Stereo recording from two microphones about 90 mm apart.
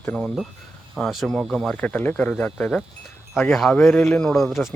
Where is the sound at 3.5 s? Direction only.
Centre (ahead or behind).